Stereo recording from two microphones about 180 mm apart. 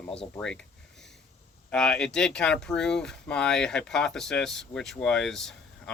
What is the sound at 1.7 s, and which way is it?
Speech, 5° left (ahead or behind).